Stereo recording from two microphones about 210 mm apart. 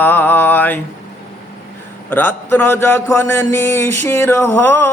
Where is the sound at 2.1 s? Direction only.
10° left (ahead or behind).